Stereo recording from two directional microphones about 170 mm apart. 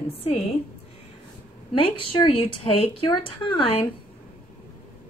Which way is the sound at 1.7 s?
30° left (ahead or behind).